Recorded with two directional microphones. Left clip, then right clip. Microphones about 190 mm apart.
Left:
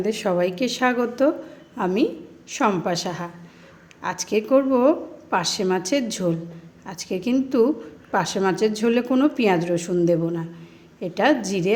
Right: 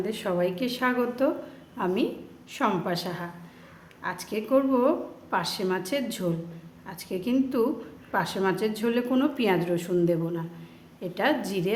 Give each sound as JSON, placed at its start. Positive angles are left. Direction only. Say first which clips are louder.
{"t": 0.0, "sound": "a woman's voice", "louder": "left 5 dB", "side_deg": 30}